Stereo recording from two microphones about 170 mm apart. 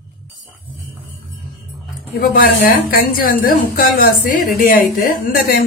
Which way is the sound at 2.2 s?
60° left (ahead or behind).